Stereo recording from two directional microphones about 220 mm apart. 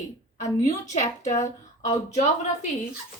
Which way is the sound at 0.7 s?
35° left (ahead or behind).